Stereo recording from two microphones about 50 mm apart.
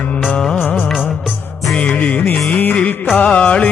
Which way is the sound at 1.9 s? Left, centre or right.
Left.